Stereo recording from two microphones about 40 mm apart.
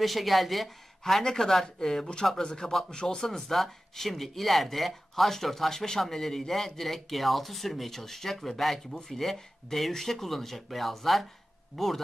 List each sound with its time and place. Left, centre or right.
0.0 s speech: centre; by 3.2 s left
3.2 s speech: centre